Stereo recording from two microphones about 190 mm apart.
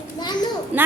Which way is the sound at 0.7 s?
10° right (ahead or behind).